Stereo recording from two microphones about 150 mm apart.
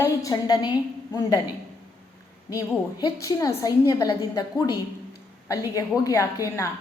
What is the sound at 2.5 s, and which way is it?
A woman's voice, 20° left (ahead or behind).